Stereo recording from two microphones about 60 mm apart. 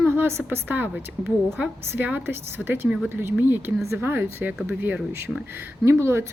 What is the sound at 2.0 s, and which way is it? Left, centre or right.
A woman's voice, right.